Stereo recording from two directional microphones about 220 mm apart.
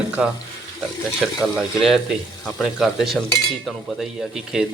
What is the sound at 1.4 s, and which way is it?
Speech, centre (ahead or behind).